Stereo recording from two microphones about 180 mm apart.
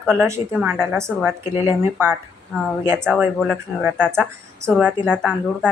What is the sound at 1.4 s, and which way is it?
Speech, 25° left (ahead or behind).